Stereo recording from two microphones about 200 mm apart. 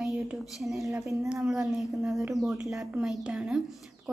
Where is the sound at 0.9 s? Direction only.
15° right (ahead or behind).